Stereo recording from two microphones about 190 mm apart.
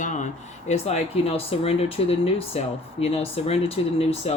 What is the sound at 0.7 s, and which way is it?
Speech, 35° left (ahead or behind).